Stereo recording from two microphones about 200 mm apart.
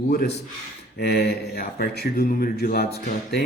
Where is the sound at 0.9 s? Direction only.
50° left (ahead or behind).